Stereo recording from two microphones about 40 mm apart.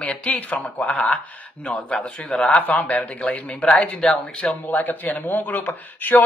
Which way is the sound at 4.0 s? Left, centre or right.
Left.